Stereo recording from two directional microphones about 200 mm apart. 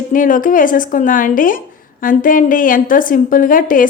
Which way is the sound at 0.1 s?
40° left (ahead or behind).